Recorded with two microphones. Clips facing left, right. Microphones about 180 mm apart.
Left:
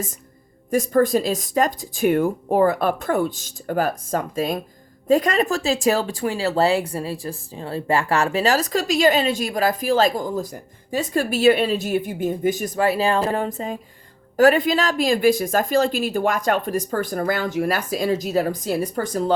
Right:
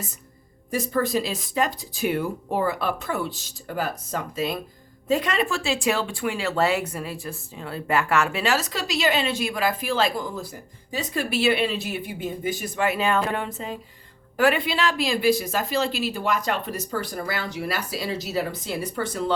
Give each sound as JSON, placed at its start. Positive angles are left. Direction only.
{"t": 0.7, "sound": "speech", "side_deg": 45}